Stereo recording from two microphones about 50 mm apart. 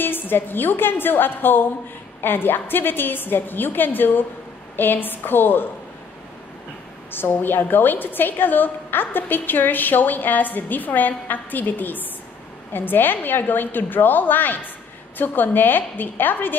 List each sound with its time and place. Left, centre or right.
0.0 s a woman's voice: left
7.1 s a woman's voice: left